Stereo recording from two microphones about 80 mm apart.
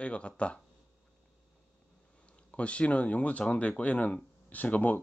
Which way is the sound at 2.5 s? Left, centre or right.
Centre.